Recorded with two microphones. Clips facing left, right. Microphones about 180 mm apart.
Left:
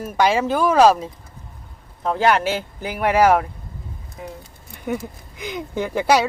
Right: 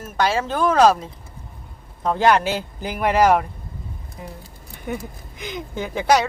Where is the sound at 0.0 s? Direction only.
15° left (ahead or behind).